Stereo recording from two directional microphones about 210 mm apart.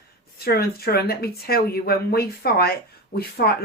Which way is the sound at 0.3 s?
50° left (ahead or behind).